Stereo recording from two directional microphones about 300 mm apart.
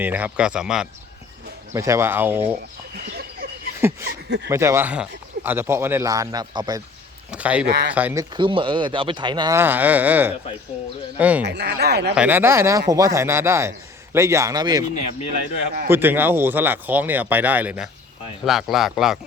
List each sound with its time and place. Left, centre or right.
0.0 s a man's voice: centre
3.8 s speech: centre
7.3 s a sound: centre
7.7 s speech: right
7.9 s a man's voice: centre
11.4 s speech: right
12.1 s speech: centre
15.9 s a man's voice: centre